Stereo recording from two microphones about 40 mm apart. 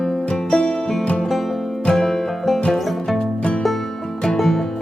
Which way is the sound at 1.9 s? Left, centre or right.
Centre.